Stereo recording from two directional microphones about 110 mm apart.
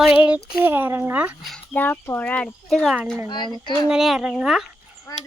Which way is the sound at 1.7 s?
15° left (ahead or behind).